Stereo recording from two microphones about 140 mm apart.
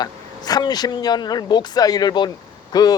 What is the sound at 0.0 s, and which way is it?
A woman's voice, 30° left (ahead or behind).